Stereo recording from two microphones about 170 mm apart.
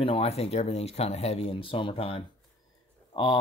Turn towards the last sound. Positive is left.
turn(degrees=25)  # may be behind; listen again after turning